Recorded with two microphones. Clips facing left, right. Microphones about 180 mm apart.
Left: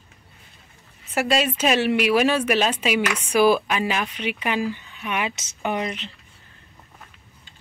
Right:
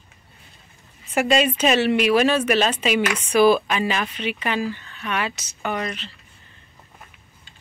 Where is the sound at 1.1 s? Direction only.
5° left (ahead or behind); by 6.1 s 20° left (ahead or behind).